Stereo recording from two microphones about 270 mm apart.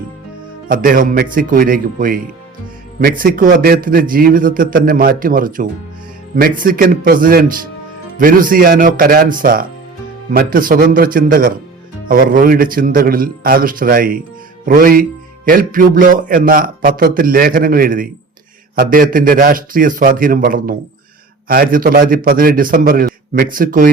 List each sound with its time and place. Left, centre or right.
0.7 s a man's voice: right